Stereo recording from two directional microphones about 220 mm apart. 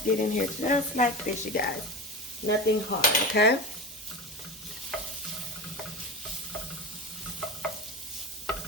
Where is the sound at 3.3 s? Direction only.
50° left (ahead or behind).